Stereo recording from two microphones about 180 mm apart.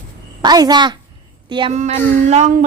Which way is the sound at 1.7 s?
40° right (ahead or behind).